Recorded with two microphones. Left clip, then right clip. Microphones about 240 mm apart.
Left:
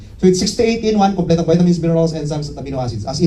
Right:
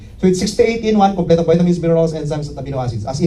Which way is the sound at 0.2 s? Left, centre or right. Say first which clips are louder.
Even; left.